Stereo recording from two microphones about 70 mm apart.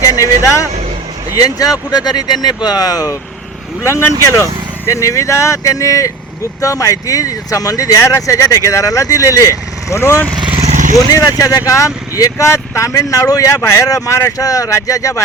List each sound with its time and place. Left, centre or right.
0.0 s vehicle: left
1.3 s speech: left
3.8 s speech: left
10.0 s speech: left
10.9 s speech: left